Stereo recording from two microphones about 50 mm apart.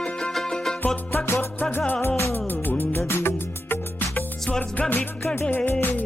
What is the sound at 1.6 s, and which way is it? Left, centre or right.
Music, left.